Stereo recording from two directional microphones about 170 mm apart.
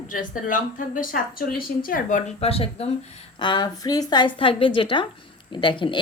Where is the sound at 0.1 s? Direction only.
50° left (ahead or behind).